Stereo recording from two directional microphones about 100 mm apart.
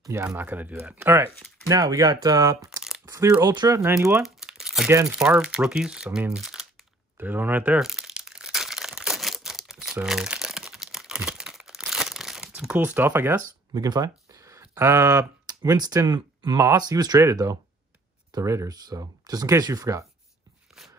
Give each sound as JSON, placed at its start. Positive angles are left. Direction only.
{"t": 0.0, "sound": "speech", "side_deg": -30}
{"t": 0.4, "sound": "speech", "side_deg": -15}
{"t": 1.7, "sound": "speech", "side_deg": -40}
{"t": 3.8, "sound": "speech", "side_deg": -25}
{"t": 4.2, "sound": "crumpling", "side_deg": -5}
{"t": 5.0, "sound": "speech", "side_deg": -10}
{"t": 7.2, "sound": "speech", "side_deg": -20}
{"t": 7.8, "sound": "crumpling", "side_deg": -5}
{"t": 12.7, "sound": "speech", "side_deg": -20}
{"t": 13.7, "sound": "speech", "side_deg": -40}